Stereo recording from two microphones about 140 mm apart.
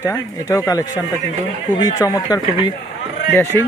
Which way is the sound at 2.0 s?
25° left (ahead or behind).